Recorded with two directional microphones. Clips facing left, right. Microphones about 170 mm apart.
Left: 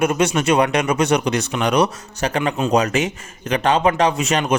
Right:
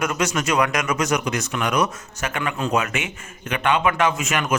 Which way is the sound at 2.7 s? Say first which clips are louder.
Left 6 dB; 35° left (ahead or behind).